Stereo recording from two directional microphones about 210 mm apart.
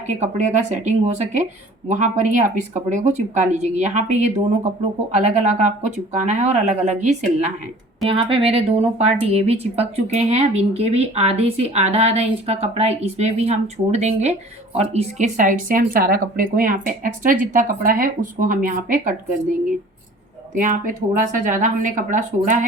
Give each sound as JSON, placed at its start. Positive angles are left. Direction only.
{"t": 0.1, "sound": "speech", "side_deg": -35}
{"t": 20.6, "sound": "speech", "side_deg": -40}